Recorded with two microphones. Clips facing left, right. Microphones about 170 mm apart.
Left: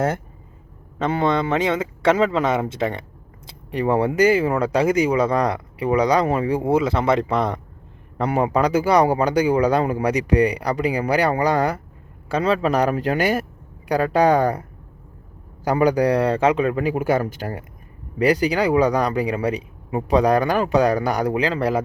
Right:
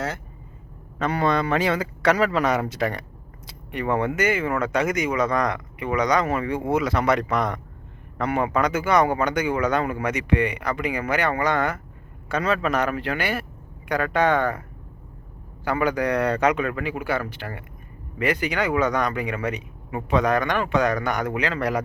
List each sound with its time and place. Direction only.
0.9 s a man's voice: 25° left (ahead or behind)
15.6 s speech: 35° left (ahead or behind)